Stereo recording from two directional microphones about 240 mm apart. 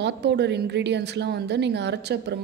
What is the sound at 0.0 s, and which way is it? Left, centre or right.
A woman's voice, right.